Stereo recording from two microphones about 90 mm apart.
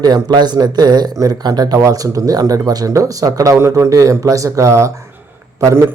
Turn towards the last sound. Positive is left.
turn(degrees=-30)  # may be behind; listen again after turning